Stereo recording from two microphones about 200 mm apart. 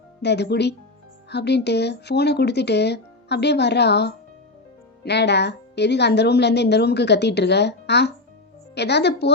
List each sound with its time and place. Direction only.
0.2 s a woman's voice: 55° left (ahead or behind)